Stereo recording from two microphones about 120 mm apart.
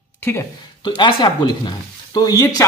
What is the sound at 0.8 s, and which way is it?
Speech, 40° left (ahead or behind).